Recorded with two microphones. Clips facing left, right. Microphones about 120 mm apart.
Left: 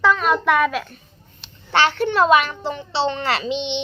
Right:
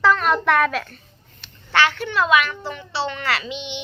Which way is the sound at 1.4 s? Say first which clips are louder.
Left 1 dB; 25° left (ahead or behind).